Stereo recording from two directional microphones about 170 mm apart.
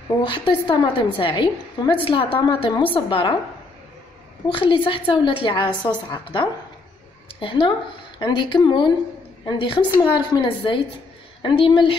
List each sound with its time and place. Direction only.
0.3 s a woman's voice: 30° left (ahead or behind)
4.6 s a woman's voice: 30° left (ahead or behind)